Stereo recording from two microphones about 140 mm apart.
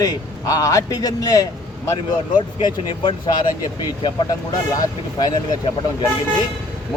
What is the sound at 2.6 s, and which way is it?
Speech, 35° left (ahead or behind).